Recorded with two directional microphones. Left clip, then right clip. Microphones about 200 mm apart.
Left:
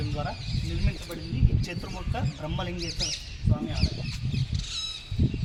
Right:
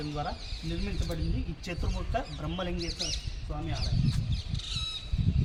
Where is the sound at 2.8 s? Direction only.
60° right (ahead or behind).